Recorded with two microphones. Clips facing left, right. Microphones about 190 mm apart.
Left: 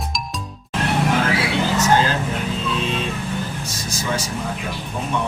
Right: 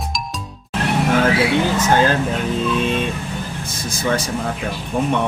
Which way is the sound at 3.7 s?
55° right (ahead or behind).